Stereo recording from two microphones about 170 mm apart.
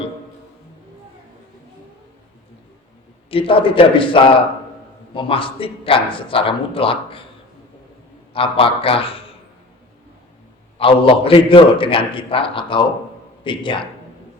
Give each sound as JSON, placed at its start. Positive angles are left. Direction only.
{"t": 3.2, "sound": "a man's voice", "side_deg": 30}
{"t": 8.3, "sound": "a man's voice", "side_deg": 30}
{"t": 10.8, "sound": "a man's voice", "side_deg": 30}